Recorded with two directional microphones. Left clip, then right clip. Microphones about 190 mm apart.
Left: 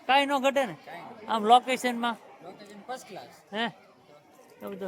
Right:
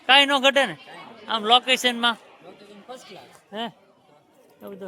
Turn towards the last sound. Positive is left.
turn(degrees=0)  # may be behind; listen again after turning